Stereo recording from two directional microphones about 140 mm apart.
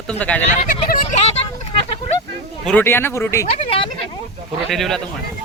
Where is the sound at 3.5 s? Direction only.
40° left (ahead or behind).